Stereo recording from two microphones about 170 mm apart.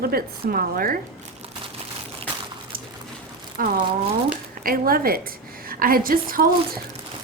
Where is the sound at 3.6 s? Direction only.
55° right (ahead or behind).